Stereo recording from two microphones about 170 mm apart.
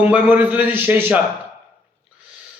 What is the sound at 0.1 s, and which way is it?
A man's voice, 10° right (ahead or behind).